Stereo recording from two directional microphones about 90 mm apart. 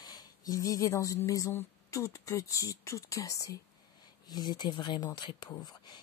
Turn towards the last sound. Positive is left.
turn(degrees=50)  # may be behind; listen again after turning